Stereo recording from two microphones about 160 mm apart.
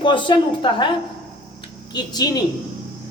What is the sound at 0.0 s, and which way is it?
Speech, 30° left (ahead or behind).